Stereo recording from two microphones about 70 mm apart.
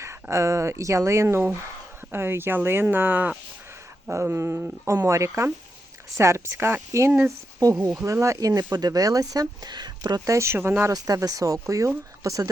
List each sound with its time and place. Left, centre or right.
0.0 s speech: right
4.1 s speech: right
7.6 s speech: right
7.9 s speech: right
10.2 s speech: right
10.9 s speech: right